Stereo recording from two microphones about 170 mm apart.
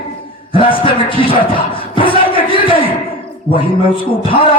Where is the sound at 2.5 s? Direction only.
30° left (ahead or behind).